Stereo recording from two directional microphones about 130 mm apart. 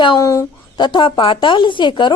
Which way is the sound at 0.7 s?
35° left (ahead or behind).